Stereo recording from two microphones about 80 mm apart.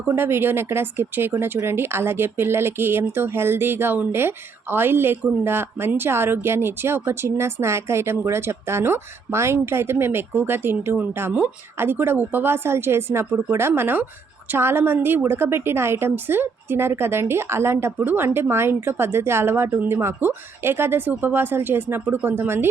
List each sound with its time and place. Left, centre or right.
0.1 s speech: right